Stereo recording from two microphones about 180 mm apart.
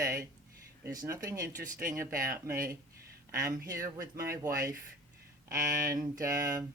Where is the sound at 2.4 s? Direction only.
15° right (ahead or behind).